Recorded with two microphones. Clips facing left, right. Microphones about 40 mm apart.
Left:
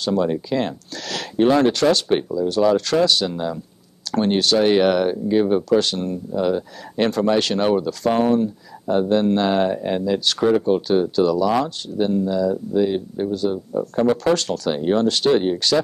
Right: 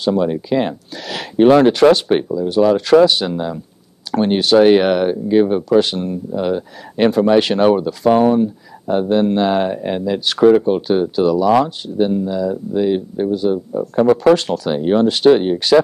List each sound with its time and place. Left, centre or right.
0.0 s speech: centre